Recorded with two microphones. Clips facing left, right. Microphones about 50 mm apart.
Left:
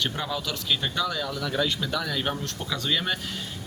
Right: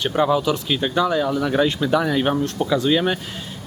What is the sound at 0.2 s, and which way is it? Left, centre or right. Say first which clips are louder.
Speech: right 12 dB; right.